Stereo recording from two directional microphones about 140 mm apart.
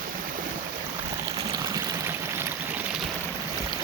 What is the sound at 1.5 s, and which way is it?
Stream, 25° right (ahead or behind).